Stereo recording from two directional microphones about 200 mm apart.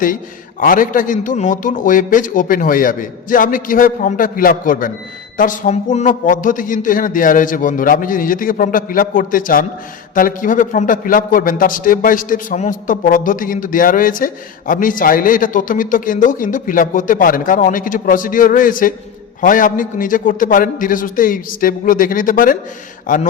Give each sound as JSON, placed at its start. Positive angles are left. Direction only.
{"t": 0.6, "sound": "a man's voice", "side_deg": 40}